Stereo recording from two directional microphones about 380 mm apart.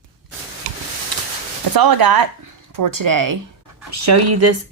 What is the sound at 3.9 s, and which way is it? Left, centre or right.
Speech, right.